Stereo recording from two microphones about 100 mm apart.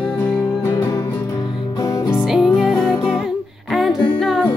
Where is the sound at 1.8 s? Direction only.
30° left (ahead or behind).